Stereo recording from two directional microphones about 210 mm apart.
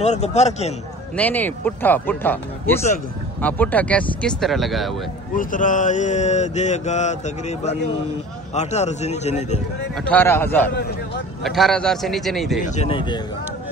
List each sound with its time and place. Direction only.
0.0 s mantra: 30° left (ahead or behind)
1.1 s a man's voice: 10° left (ahead or behind)
5.3 s mantra: 40° left (ahead or behind)
10.0 s a man's voice: 10° left (ahead or behind)
12.6 s speech: 30° left (ahead or behind)